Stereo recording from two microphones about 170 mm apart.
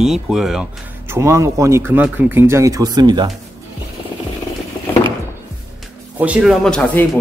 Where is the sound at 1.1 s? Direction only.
15° right (ahead or behind).